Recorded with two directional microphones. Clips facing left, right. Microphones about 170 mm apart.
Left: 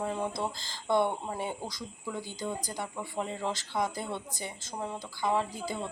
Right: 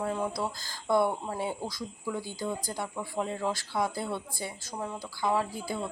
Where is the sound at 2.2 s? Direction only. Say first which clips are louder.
Right 2 dB; 20° left (ahead or behind).